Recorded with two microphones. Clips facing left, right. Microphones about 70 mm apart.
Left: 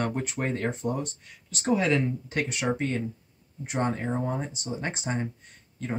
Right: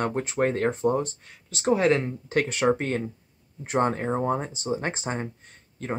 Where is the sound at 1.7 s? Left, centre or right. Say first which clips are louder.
Right 3 dB; right.